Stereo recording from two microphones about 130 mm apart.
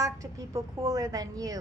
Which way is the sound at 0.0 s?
25° right (ahead or behind).